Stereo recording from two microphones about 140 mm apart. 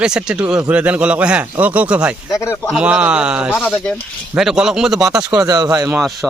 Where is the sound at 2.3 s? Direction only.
20° left (ahead or behind).